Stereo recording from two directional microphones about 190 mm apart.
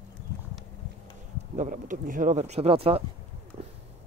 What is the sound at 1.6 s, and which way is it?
Speech, 40° right (ahead or behind).